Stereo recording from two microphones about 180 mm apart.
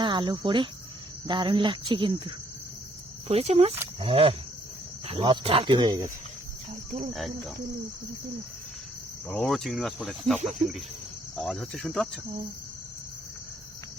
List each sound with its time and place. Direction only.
0.0 s speech: 25° right (ahead or behind)
7.1 s cricket: centre (ahead or behind)
9.3 s cricket: 5° left (ahead or behind)